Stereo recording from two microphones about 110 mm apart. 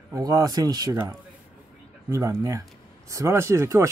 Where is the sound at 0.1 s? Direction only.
35° right (ahead or behind).